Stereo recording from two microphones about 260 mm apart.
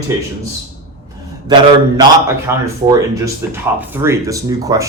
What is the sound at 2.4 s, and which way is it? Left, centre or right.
Speech, centre.